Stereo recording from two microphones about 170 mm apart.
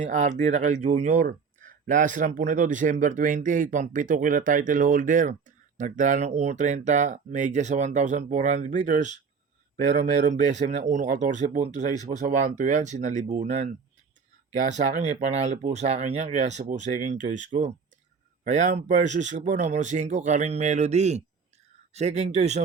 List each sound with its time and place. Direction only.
0.0 s speech: 45° right (ahead or behind)